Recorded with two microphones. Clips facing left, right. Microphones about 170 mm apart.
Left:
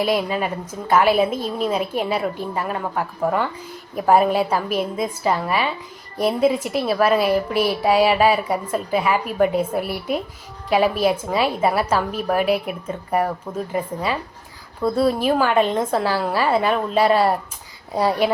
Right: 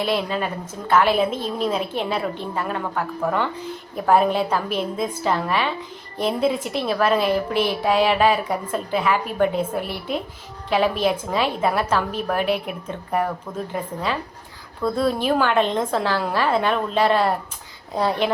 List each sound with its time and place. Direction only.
0.0 s a woman's voice: 5° left (ahead or behind)